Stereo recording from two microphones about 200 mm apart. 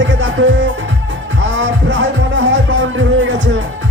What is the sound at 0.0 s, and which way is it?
Music, 65° right (ahead or behind).